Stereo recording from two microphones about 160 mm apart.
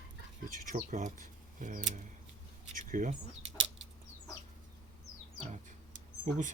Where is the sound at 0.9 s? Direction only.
55° right (ahead or behind).